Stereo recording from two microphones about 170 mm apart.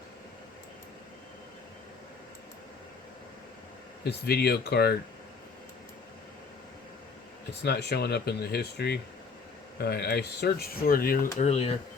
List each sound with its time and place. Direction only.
4.3 s speech: 70° left (ahead or behind)
7.6 s speech: 75° left (ahead or behind); by 11.7 s 40° left (ahead or behind)